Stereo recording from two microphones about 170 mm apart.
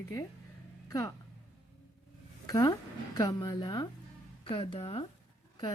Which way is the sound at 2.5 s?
20° left (ahead or behind).